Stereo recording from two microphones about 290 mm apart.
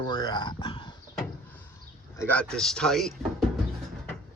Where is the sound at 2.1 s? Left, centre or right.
Centre.